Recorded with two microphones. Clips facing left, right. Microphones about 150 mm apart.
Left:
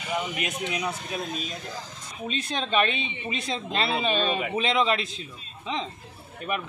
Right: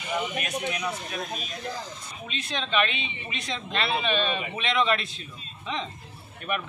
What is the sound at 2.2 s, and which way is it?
Speech, 40° left (ahead or behind).